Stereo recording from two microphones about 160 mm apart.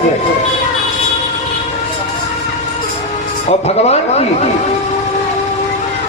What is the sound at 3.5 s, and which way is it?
Speech, 40° left (ahead or behind).